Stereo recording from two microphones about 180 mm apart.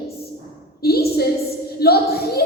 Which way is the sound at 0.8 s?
60° left (ahead or behind).